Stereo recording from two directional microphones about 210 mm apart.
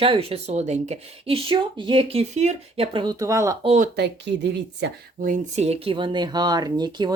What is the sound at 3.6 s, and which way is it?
A woman's voice, 40° right (ahead or behind).